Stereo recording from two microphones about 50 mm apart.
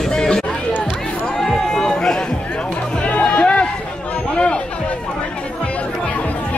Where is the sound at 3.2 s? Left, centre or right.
Centre.